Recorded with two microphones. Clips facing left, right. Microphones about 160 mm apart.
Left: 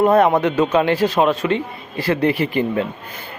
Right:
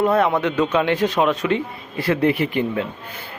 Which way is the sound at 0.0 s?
50° left (ahead or behind).